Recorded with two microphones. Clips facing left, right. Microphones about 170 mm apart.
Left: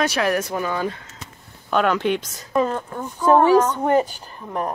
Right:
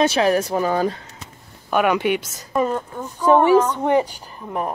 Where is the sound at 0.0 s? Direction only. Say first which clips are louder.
Right 4 dB; 25° right (ahead or behind).